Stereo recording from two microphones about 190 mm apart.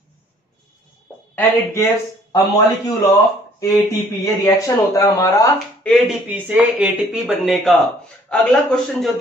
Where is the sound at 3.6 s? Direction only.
15° left (ahead or behind).